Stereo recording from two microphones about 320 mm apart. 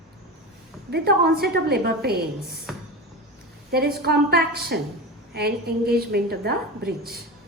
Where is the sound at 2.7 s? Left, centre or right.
Centre.